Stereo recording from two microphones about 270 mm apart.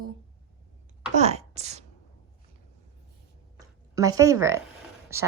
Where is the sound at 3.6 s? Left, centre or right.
Centre.